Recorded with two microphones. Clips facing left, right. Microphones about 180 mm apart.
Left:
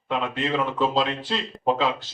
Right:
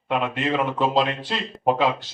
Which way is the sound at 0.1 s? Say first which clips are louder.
Right 2 dB; 20° right (ahead or behind).